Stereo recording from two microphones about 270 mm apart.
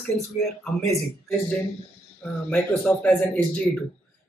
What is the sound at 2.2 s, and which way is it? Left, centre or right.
Speech, centre.